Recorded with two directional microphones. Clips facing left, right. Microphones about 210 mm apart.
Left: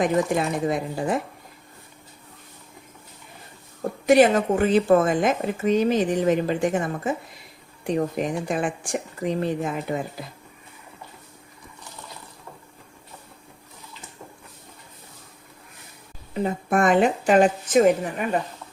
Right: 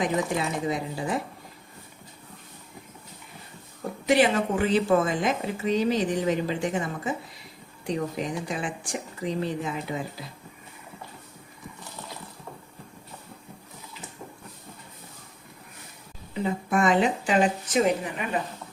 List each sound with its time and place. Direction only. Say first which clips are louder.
0.0 s speech: left 5 dB; 50° left (ahead or behind)
4.0 s speech: left 5 dB; 45° left (ahead or behind)
16.3 s speech: left 3 dB; 50° left (ahead or behind)